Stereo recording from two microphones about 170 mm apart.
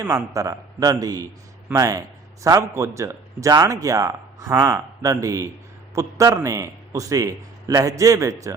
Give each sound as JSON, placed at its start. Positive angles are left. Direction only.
{"t": 0.0, "sound": "a man's voice", "side_deg": -20}